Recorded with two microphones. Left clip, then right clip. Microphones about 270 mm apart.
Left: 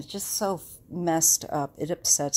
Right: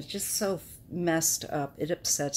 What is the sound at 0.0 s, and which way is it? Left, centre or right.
Speech, left.